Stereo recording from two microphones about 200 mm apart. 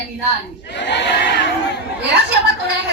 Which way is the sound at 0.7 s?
60° left (ahead or behind).